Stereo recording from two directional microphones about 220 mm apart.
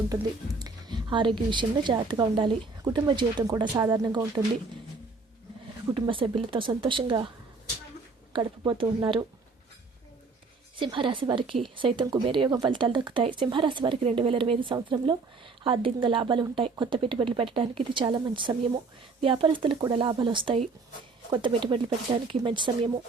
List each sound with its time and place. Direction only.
0.6 s speech: 20° right (ahead or behind)
5.9 s speech: 25° right (ahead or behind)
8.3 s speech: 20° right (ahead or behind)
10.8 s speech: 25° right (ahead or behind)